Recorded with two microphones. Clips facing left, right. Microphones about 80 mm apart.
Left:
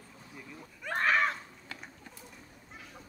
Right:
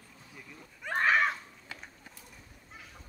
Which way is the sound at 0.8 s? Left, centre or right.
Centre.